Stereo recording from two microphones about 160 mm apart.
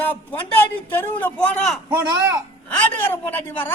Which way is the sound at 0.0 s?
10° left (ahead or behind).